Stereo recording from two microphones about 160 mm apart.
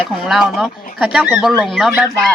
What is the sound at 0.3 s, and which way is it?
Speech, centre (ahead or behind).